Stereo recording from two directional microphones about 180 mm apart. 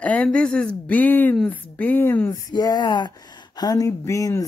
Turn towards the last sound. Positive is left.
turn(degrees=15)  # may be behind; listen again after turning